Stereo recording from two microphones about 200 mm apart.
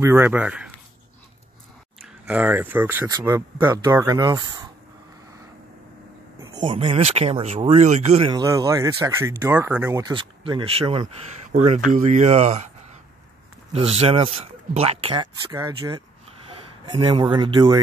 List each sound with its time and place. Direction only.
0.0 s speech: 10° right (ahead or behind)
2.2 s speech: 5° right (ahead or behind)
6.4 s speech: 20° right (ahead or behind)
13.7 s speech: 30° right (ahead or behind)